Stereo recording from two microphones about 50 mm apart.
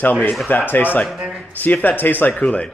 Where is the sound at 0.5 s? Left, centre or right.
Left.